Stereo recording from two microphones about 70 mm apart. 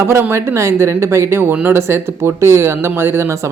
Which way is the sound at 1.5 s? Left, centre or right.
Right.